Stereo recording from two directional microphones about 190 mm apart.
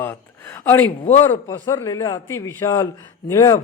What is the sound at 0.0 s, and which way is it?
A man's voice, 10° left (ahead or behind).